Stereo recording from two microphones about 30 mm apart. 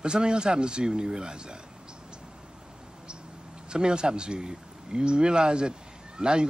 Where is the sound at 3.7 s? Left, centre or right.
Right.